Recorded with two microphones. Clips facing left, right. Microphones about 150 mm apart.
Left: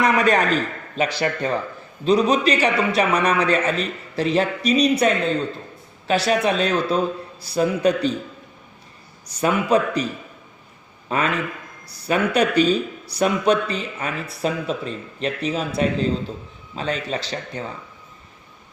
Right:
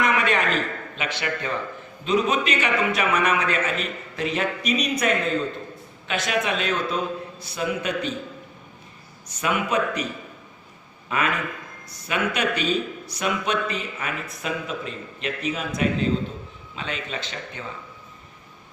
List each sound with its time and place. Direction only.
0.0 s a man's voice: 40° left (ahead or behind)
9.4 s speech: 35° left (ahead or behind)
11.1 s speech: 30° left (ahead or behind)